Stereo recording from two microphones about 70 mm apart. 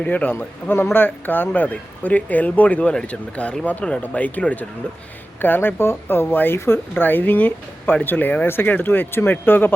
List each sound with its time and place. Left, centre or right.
0.0 s speech: left